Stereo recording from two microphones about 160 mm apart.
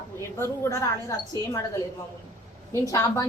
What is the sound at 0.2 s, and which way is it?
Speech, 15° left (ahead or behind).